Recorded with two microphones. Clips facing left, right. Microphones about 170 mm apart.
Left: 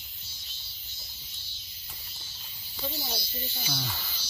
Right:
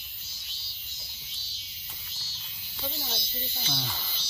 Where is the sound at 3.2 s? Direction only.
25° right (ahead or behind).